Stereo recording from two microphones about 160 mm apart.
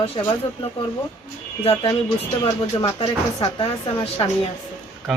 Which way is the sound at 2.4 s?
30° left (ahead or behind).